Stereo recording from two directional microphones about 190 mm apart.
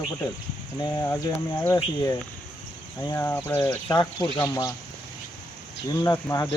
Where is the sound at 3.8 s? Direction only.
20° left (ahead or behind).